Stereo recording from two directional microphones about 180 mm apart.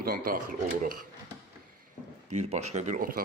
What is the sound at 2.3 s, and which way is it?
Speech, 35° right (ahead or behind).